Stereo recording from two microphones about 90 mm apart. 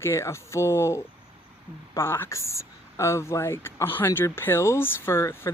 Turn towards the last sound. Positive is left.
turn(degrees=30)  # may be behind; listen again after turning